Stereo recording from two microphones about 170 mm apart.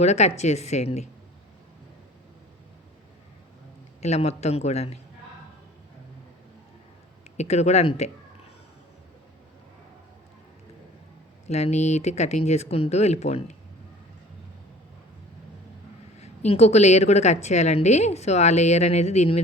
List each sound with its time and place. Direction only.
0.0 s a woman's voice: 40° left (ahead or behind)
4.0 s a woman's voice: 40° left (ahead or behind)
7.3 s a woman's voice: 40° left (ahead or behind)
11.4 s a woman's voice: 40° left (ahead or behind)
16.1 s a woman's voice: 40° left (ahead or behind)